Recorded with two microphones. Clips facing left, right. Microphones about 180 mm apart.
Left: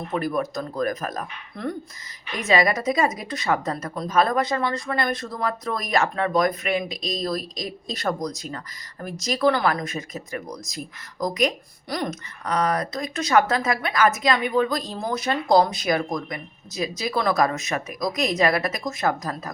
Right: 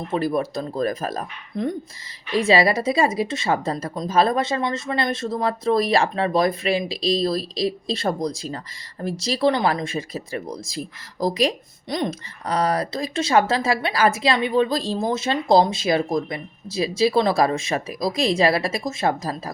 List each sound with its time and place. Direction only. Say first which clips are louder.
0.1 s speech: right 3 dB; 30° right (ahead or behind)